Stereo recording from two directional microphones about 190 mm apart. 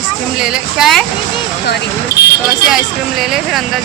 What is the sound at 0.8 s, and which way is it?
Speech, centre (ahead or behind).